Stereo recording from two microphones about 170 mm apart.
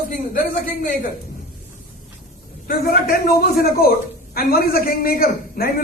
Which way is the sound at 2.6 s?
60° left (ahead or behind).